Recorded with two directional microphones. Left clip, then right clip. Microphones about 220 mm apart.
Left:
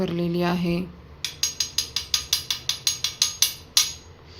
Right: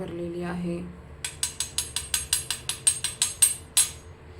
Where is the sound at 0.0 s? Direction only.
50° left (ahead or behind).